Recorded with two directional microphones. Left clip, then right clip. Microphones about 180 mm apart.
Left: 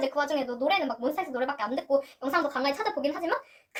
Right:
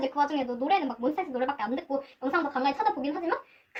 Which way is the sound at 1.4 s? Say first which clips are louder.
Even; 20° left (ahead or behind).